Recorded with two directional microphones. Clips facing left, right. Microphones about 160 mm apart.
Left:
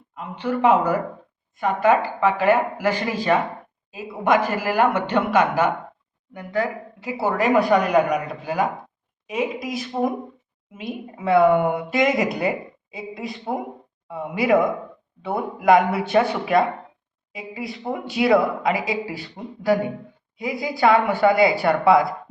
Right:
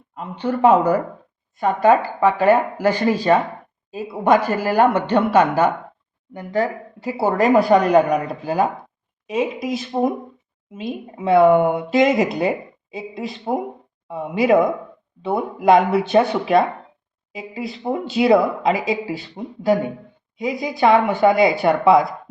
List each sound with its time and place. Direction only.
0.4 s a woman's voice: 35° right (ahead or behind)